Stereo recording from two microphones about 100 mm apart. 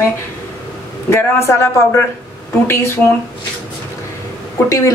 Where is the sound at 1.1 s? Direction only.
25° left (ahead or behind).